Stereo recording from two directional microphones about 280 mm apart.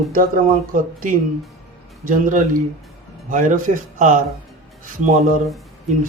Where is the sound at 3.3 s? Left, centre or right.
Right.